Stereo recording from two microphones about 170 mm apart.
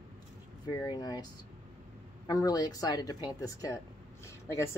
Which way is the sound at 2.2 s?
20° left (ahead or behind).